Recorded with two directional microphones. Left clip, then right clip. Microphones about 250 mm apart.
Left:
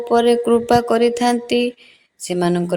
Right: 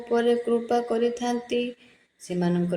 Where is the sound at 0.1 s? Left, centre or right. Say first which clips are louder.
Left 8 dB; left.